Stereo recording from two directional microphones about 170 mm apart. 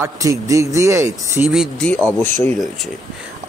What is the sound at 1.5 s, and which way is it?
Speech, centre (ahead or behind).